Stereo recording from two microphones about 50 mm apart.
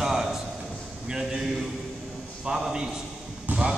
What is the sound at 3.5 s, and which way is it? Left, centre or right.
Basketball bounce, right.